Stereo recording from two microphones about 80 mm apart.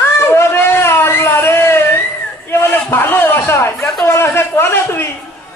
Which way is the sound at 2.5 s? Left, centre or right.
Left.